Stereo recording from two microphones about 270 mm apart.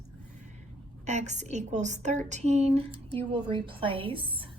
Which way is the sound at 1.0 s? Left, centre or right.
Right.